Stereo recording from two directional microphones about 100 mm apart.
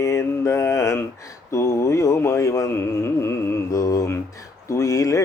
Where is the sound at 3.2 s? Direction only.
30° left (ahead or behind).